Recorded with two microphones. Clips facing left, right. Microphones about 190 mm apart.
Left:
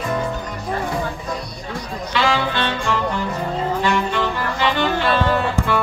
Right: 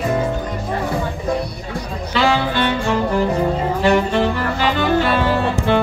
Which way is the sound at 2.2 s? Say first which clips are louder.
Right 4 dB; 40° right (ahead or behind).